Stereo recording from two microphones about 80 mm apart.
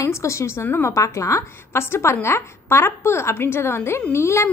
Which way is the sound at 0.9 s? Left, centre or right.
Left.